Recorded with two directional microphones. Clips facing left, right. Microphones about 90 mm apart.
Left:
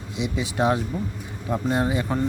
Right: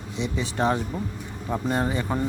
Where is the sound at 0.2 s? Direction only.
10° left (ahead or behind).